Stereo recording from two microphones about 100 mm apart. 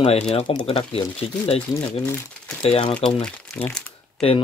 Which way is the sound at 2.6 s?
80° left.